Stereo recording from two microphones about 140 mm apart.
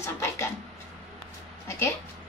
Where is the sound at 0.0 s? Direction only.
20° left (ahead or behind).